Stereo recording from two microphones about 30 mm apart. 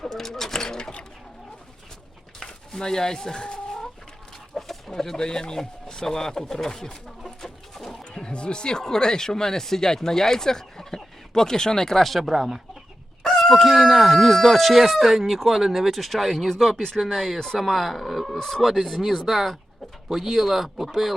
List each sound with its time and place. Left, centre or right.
0.0 s speech: centre
2.4 s chicken: centre
4.5 s a sound: centre
4.9 s speech: centre
7.2 s chicken: centre
8.1 s speech: left; by 12.0 s centre
12.0 s speech: centre
12.3 s speech: centre
13.2 s speech: centre
15.5 s speech: centre
15.9 s speech: centre
17.0 s speech: centre